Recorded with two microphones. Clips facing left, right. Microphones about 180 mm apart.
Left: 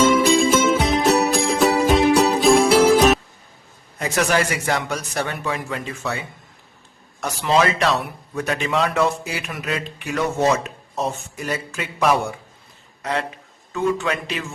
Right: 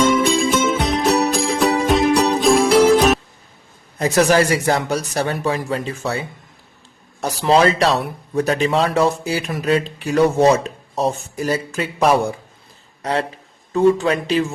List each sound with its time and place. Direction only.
0.0 s music: centre (ahead or behind)
3.9 s a man's voice: 35° right (ahead or behind)